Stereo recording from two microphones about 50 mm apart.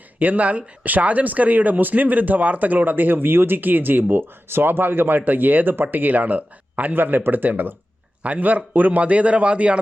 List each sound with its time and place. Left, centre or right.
0.2 s a man's voice: right